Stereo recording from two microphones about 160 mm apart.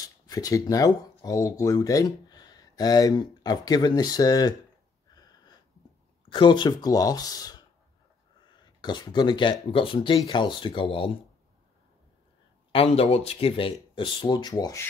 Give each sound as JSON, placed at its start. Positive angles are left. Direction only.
{"t": 0.0, "sound": "speech", "side_deg": 20}
{"t": 5.1, "sound": "wheeze", "side_deg": 25}
{"t": 6.2, "sound": "speech", "side_deg": 30}
{"t": 12.7, "sound": "speech", "side_deg": 40}